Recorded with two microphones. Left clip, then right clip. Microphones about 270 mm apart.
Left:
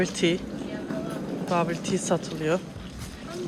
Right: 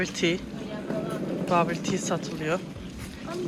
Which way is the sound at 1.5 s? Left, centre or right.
Centre.